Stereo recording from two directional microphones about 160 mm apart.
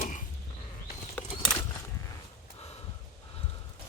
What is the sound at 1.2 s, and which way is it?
Horse, 10° left (ahead or behind).